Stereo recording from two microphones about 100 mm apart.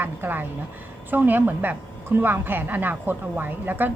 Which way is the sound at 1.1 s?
20° right (ahead or behind).